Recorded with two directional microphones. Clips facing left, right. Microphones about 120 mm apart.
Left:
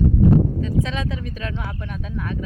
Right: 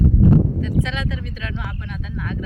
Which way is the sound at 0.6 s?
35° left (ahead or behind).